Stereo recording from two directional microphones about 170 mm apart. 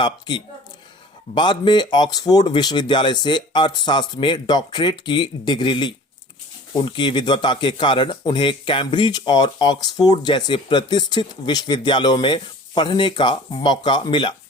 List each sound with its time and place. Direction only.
0.0 s speech: 25° left (ahead or behind)